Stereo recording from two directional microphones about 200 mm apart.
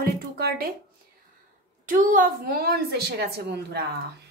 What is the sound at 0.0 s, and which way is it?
Speech, 50° right (ahead or behind).